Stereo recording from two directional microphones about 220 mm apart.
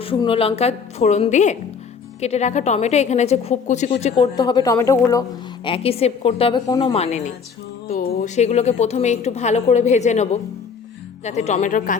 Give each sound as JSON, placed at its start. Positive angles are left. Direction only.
{"t": 0.0, "sound": "a woman's voice", "side_deg": 25}
{"t": 5.6, "sound": "a woman's voice", "side_deg": 25}
{"t": 6.9, "sound": "a woman's voice", "side_deg": 30}
{"t": 8.4, "sound": "a woman's voice", "side_deg": 30}